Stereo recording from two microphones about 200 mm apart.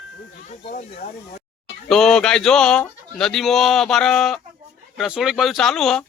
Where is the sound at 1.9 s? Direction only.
Centre (ahead or behind).